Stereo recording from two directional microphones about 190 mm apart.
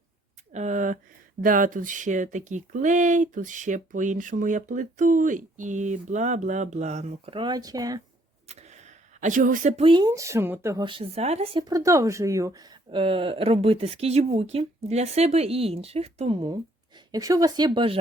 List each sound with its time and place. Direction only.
0.5 s a sound: 40° right (ahead or behind)
1.4 s speech: 45° right (ahead or behind); by 8.0 s 20° right (ahead or behind)
8.4 s speech: 35° right (ahead or behind); by 10.8 s 15° right (ahead or behind)
10.8 s speech: 30° right (ahead or behind)